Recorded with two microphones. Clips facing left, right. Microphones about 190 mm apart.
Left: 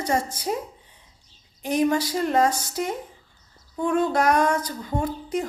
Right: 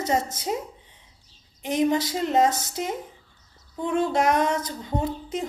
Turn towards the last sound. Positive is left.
turn(degrees=-25)  # may be behind; listen again after turning